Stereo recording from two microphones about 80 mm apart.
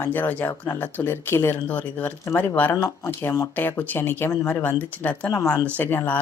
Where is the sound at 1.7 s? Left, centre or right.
Centre.